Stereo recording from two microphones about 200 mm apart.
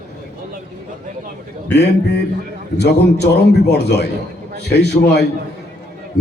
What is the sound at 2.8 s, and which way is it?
A man's voice, 55° left (ahead or behind).